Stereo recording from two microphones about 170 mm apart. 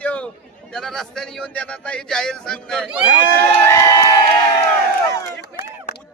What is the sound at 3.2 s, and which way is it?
Crowd, 60° right (ahead or behind).